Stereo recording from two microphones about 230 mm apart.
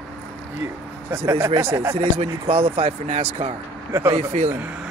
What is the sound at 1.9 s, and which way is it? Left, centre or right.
Speech, right.